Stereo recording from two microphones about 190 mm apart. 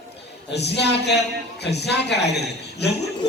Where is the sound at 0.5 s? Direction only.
60° left (ahead or behind).